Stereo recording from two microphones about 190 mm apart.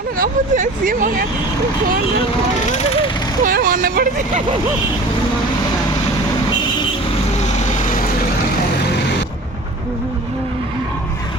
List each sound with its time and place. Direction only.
0.2 s speech: 45° right (ahead or behind)
3.4 s speech: 50° right (ahead or behind)
7.3 s vehicle: 35° left (ahead or behind)